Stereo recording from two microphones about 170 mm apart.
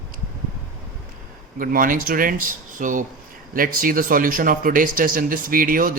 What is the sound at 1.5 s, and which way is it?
Speech, 55° right (ahead or behind).